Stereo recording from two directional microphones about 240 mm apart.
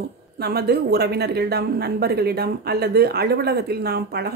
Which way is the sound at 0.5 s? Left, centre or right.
Right.